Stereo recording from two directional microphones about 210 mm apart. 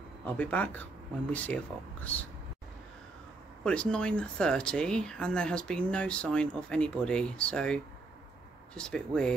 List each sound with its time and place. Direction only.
0.2 s speech: 5° left (ahead or behind)
3.6 s speech: 5° left (ahead or behind)